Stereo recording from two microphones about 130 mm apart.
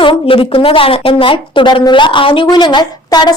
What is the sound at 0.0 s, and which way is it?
A woman's voice, 45° left (ahead or behind).